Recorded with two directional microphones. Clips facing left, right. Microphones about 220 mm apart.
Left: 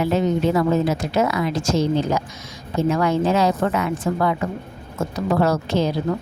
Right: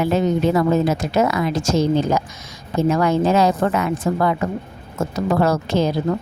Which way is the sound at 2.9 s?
45° right (ahead or behind).